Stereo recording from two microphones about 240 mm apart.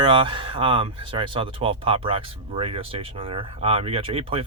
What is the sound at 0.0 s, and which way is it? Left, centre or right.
Speech, right.